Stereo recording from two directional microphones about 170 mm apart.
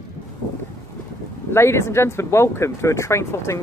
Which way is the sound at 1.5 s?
15° left (ahead or behind).